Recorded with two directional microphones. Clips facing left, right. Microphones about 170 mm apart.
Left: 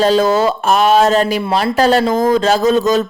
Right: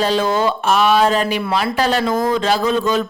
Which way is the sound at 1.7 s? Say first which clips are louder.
Left 7 dB; 40° left (ahead or behind).